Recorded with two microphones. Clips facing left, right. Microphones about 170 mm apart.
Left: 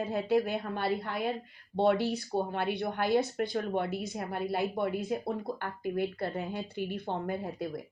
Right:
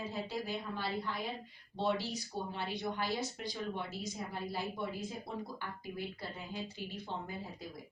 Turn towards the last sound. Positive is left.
turn(degrees=60)  # may be behind; listen again after turning